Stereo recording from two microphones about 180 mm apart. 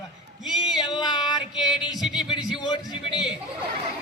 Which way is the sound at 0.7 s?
25° left (ahead or behind).